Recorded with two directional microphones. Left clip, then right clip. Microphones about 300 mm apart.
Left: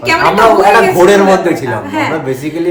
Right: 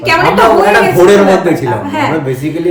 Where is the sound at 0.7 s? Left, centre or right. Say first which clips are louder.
Even; centre.